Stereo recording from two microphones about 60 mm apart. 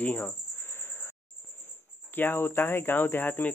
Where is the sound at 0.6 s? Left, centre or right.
Left.